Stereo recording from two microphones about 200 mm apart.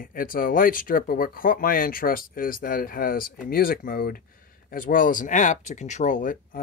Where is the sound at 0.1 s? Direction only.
45° left (ahead or behind).